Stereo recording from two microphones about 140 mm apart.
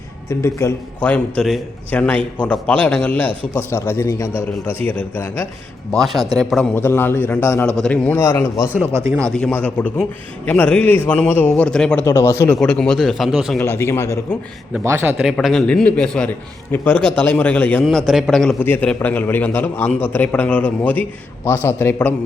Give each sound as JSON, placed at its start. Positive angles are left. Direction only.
{"t": 0.3, "sound": "a man's voice", "side_deg": 20}
{"t": 6.1, "sound": "speech", "side_deg": -25}
{"t": 6.4, "sound": "a man's voice", "side_deg": 5}
{"t": 6.7, "sound": "a man's voice", "side_deg": 15}
{"t": 8.7, "sound": "speech", "side_deg": -15}
{"t": 9.3, "sound": "a man's voice", "side_deg": 10}
{"t": 12.0, "sound": "speech", "side_deg": 20}
{"t": 12.5, "sound": "a man's voice", "side_deg": 5}
{"t": 13.6, "sound": "speech", "side_deg": 20}
{"t": 14.8, "sound": "a man's voice", "side_deg": -20}
{"t": 15.2, "sound": "a man's voice", "side_deg": 0}